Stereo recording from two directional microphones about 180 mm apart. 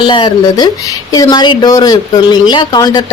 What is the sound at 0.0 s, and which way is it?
Speech, 25° left (ahead or behind).